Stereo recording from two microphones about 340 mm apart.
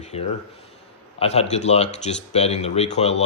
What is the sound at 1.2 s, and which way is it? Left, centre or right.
Speech, centre.